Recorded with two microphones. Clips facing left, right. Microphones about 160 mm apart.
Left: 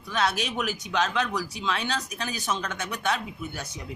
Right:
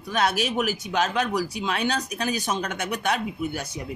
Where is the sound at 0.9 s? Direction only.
45° right (ahead or behind).